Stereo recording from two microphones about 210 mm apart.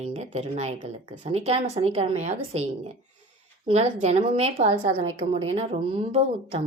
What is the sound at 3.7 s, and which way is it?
A woman's voice, 30° right (ahead or behind).